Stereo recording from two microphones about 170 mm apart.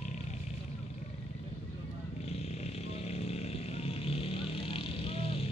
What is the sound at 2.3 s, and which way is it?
Vehicle, 40° left (ahead or behind).